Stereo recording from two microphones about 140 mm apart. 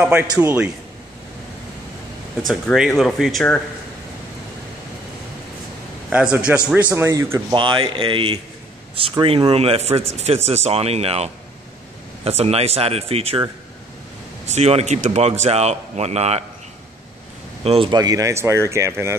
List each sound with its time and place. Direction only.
0.0 s a man's voice: 15° right (ahead or behind)
2.4 s speech: centre (ahead or behind)
6.0 s a man's voice: 10° right (ahead or behind)
7.5 s speech: 35° right (ahead or behind)
12.3 s speech: 45° right (ahead or behind)
14.5 s speech: 50° right (ahead or behind)
17.6 s speech: 35° right (ahead or behind); by 19.1 s 20° right (ahead or behind)